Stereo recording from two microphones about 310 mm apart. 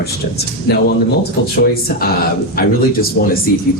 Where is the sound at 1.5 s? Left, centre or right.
Left.